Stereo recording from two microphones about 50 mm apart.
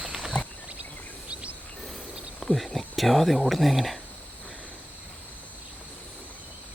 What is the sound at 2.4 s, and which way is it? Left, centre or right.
Speech, centre.